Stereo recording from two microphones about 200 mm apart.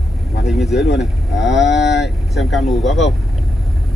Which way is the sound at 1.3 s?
60° left (ahead or behind).